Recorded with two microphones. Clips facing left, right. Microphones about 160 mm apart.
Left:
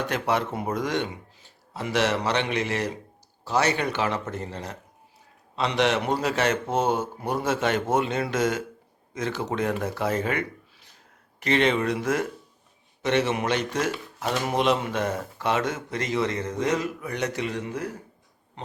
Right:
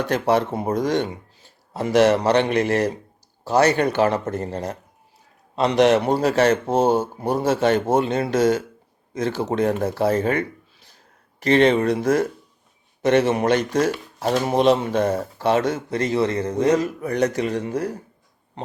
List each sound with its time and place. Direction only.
0.1 s speech: 35° right (ahead or behind)